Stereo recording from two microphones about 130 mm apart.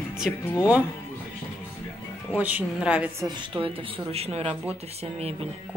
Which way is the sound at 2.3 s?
10° right (ahead or behind).